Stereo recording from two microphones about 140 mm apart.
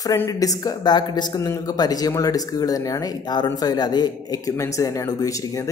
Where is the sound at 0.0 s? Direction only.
25° left (ahead or behind).